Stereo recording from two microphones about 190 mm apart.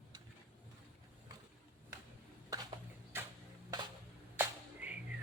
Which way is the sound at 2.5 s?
15° right (ahead or behind).